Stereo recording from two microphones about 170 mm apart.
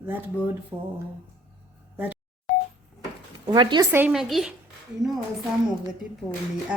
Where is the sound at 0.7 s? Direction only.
25° right (ahead or behind).